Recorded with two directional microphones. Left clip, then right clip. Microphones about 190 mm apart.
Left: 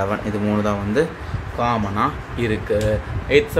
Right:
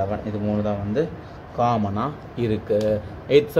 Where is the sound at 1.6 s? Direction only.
5° right (ahead or behind).